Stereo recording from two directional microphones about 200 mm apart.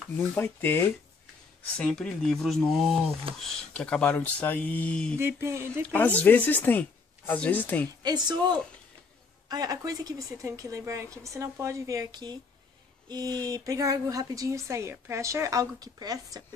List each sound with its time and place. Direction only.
0.3 s speech: 10° left (ahead or behind)
3.3 s a woman's voice: 25° right (ahead or behind)
3.7 s speech: 5° left (ahead or behind)
5.1 s a woman's voice: 15° right (ahead or behind)
5.9 s speech: 10° left (ahead or behind)
8.0 s a woman's voice: 20° right (ahead or behind)